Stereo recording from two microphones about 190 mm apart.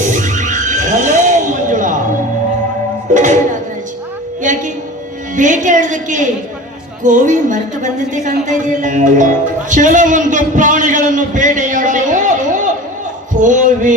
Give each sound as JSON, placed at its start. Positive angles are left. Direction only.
{"t": 0.1, "sound": "music", "side_deg": -40}
{"t": 3.2, "sound": "speech", "side_deg": -40}
{"t": 5.4, "sound": "a sound", "side_deg": -40}
{"t": 7.0, "sound": "speech", "side_deg": -45}